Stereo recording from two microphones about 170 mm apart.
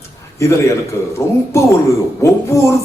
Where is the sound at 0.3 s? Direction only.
15° left (ahead or behind).